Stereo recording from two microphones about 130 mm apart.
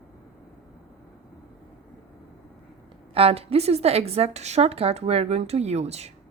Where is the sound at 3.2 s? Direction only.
50° right (ahead or behind).